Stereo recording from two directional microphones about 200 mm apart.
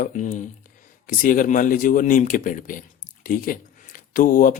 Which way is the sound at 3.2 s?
45° left (ahead or behind).